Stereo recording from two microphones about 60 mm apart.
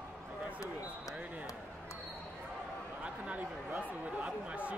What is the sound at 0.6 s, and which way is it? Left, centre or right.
Speech, left.